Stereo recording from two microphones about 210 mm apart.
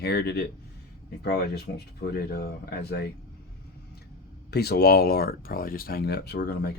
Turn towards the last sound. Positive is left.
turn(degrees=50)  # may be behind; listen again after turning